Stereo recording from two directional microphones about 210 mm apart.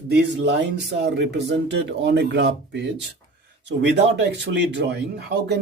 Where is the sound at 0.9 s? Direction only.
55° right (ahead or behind).